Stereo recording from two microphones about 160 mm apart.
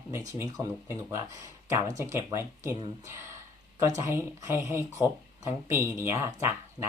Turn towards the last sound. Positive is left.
turn(degrees=-20)  # may be behind; listen again after turning